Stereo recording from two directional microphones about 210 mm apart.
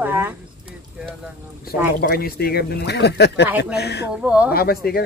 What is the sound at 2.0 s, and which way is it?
Speech, 45° left (ahead or behind).